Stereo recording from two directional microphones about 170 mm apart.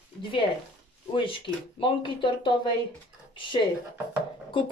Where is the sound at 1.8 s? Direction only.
30° left (ahead or behind).